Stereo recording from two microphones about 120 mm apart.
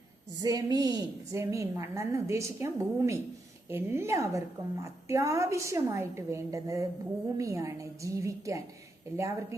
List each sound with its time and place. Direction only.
0.3 s a woman's voice: 30° right (ahead or behind)